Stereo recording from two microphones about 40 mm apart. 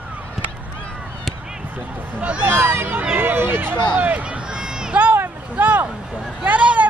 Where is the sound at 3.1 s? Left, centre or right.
Right.